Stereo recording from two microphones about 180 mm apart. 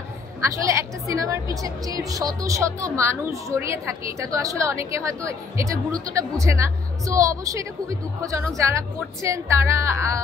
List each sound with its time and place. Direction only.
0.4 s a woman's voice: 15° right (ahead or behind)